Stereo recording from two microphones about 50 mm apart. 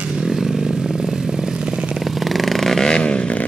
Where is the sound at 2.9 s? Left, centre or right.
Left.